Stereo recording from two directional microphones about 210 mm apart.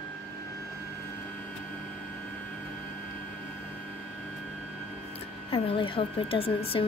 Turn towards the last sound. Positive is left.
turn(degrees=25)  # may be behind; listen again after turning